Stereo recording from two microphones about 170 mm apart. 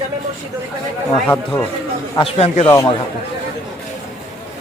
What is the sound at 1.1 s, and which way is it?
Speech, 10° left (ahead or behind).